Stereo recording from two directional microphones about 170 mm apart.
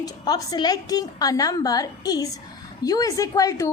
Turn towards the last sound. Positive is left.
turn(degrees=20)  # may be behind; listen again after turning